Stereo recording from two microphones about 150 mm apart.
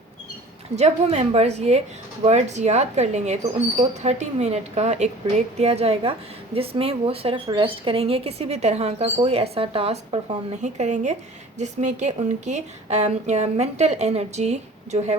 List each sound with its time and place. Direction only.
0.8 s a woman's voice: 50° right (ahead or behind)
10.6 s a woman's voice: 55° right (ahead or behind)